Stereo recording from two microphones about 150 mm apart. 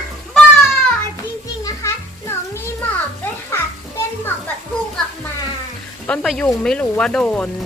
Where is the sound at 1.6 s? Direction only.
20° left (ahead or behind).